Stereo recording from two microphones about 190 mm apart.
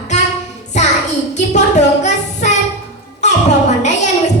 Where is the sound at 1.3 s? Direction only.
40° left (ahead or behind).